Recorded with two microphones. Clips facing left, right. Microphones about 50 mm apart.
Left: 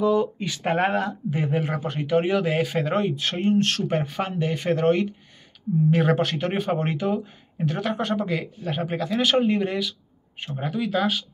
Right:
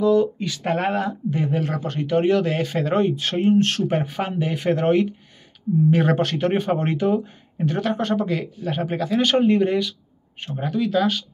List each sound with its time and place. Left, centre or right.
0.0 s a sound: centre
0.6 s speech: centre
1.4 s speech: centre